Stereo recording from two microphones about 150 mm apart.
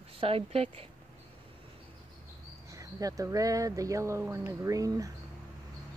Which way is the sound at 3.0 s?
20° right (ahead or behind).